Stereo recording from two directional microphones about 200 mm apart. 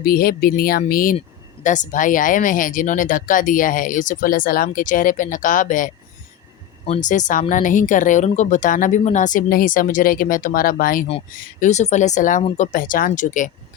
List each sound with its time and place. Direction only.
0.0 s speech: 50° left (ahead or behind)